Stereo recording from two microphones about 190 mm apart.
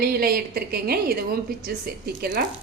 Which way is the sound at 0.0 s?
50° right (ahead or behind).